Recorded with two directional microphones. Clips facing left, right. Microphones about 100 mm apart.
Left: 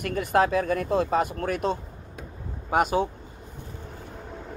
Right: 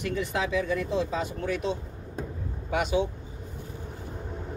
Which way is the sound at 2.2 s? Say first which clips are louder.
Right 7 dB; 35° right (ahead or behind).